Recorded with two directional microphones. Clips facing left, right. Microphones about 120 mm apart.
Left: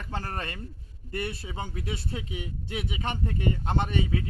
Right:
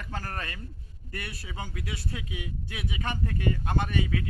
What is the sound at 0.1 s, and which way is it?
Speech, 30° left (ahead or behind).